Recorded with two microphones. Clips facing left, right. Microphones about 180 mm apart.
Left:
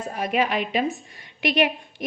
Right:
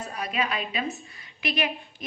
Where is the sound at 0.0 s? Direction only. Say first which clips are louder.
Left 6 dB; 50° left (ahead or behind).